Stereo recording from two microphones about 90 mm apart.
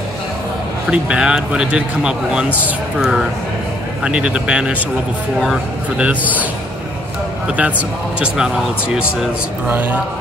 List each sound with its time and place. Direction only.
0.8 s speech: 10° right (ahead or behind)
6.0 s speech: 20° right (ahead or behind)
7.4 s speech: 15° right (ahead or behind)
9.7 s speech: 20° right (ahead or behind)